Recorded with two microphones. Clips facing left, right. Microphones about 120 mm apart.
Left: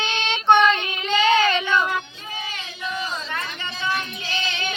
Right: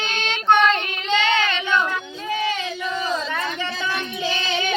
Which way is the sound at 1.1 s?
80° right.